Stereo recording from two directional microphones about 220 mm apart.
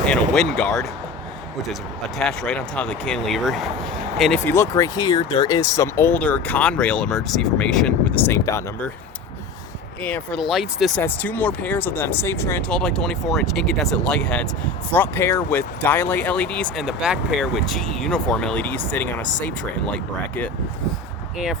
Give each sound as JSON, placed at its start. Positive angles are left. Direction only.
{"t": 0.1, "sound": "speech", "side_deg": 5}
{"t": 2.1, "sound": "speech", "side_deg": 5}
{"t": 10.0, "sound": "speech", "side_deg": 5}